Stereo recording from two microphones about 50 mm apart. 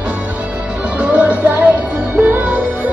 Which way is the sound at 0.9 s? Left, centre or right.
Right.